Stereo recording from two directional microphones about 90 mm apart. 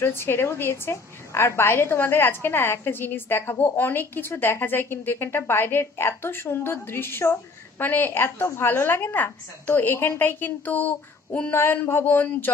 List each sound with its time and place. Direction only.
0.0 s a woman's voice: 25° left (ahead or behind)